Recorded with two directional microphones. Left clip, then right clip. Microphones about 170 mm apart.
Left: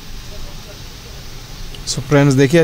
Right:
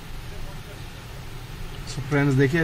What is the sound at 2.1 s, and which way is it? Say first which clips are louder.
Speech: left 9 dB; 75° left (ahead or behind).